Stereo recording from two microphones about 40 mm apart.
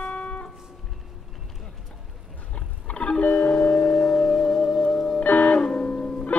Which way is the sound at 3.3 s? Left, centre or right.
Left.